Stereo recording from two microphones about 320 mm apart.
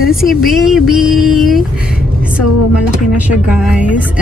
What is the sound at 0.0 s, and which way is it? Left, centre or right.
Speech, centre.